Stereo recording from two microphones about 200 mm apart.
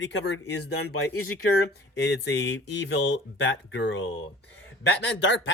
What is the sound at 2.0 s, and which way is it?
Speech, 60° left (ahead or behind).